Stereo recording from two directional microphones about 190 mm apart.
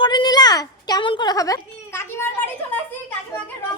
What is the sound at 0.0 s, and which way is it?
A woman's voice, 25° left (ahead or behind).